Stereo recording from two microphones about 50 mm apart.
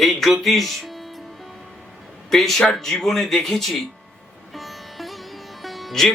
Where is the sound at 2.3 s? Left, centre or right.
Centre.